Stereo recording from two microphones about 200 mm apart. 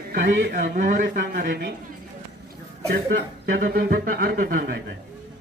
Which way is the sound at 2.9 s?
45° right (ahead or behind).